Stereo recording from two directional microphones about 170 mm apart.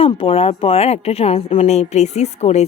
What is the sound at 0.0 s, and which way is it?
Speech, 35° left (ahead or behind).